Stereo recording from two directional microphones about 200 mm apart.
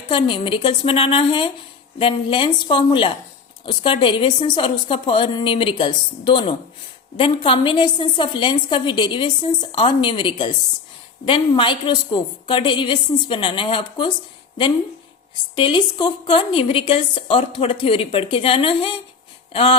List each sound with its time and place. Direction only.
0.1 s a woman's voice: 25° left (ahead or behind)
15.5 s a woman's voice: 25° left (ahead or behind)